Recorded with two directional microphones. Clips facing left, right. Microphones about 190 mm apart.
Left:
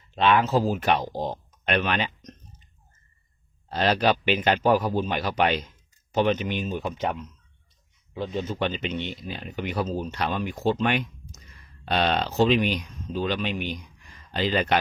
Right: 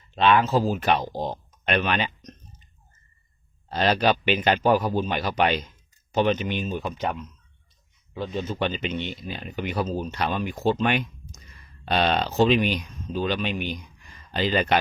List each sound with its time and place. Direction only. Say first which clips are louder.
0.2 s speech: right 1 dB; 10° left (ahead or behind)
3.7 s a man's voice: right 1 dB; 5° left (ahead or behind)
6.9 s speech: even; 25° left (ahead or behind)
8.4 s speech: right 1 dB; centre (ahead or behind)